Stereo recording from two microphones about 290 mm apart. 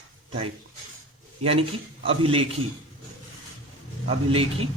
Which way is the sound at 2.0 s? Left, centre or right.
Centre.